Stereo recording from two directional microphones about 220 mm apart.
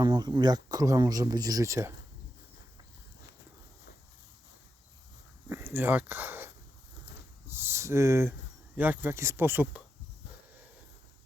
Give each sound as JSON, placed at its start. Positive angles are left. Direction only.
{"t": 0.0, "sound": "speech", "side_deg": -20}
{"t": 5.5, "sound": "speech", "side_deg": -10}